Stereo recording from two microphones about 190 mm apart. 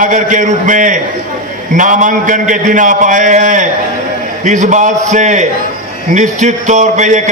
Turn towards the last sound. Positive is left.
turn(degrees=-40)  # may be behind; listen again after turning